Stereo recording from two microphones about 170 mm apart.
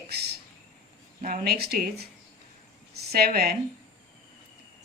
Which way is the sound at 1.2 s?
55° right (ahead or behind).